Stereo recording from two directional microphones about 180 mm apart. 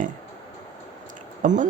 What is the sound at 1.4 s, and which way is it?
Speech, 45° right (ahead or behind).